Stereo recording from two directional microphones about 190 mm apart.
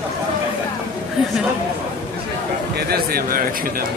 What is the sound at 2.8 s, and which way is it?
A man's voice, 55° right (ahead or behind).